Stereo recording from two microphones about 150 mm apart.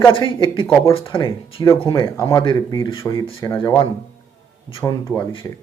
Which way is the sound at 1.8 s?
25° left (ahead or behind).